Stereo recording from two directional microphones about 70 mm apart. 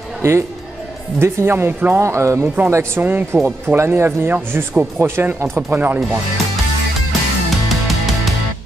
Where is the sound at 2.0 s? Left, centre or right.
Right.